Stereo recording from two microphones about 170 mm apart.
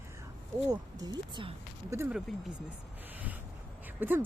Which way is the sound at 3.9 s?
10° right (ahead or behind).